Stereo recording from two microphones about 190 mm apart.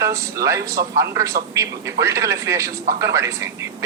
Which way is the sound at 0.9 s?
15° right (ahead or behind).